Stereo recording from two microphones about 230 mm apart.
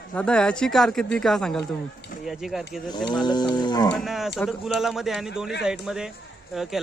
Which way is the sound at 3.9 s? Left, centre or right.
Centre.